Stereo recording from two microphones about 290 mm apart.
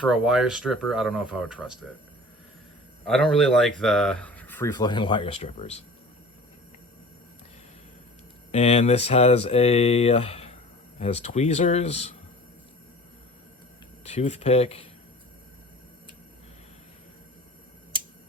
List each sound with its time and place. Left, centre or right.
0.0 s speech: centre
3.1 s speech: centre; by 5.8 s left
8.5 s speech: left
14.0 s speech: left